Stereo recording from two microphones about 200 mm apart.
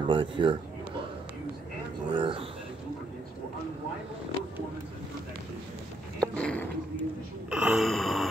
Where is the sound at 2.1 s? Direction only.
25° right (ahead or behind).